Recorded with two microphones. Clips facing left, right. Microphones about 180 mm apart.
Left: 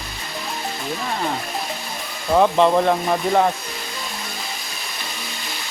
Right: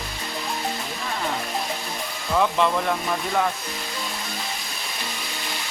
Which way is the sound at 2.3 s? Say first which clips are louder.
Left 6 dB; 35° left (ahead or behind).